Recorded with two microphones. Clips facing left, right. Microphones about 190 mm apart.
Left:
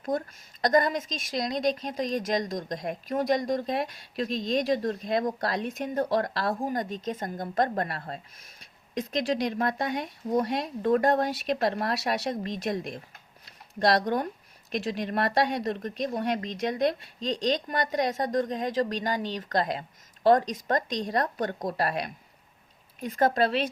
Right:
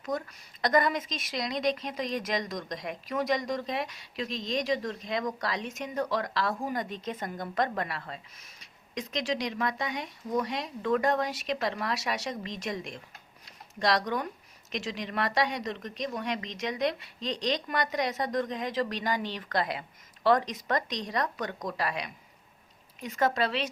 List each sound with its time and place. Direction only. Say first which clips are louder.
0.0 s a woman's voice: left 4 dB; 50° left (ahead or behind)
6.5 s a woman's voice: left 3 dB; 35° left (ahead or behind)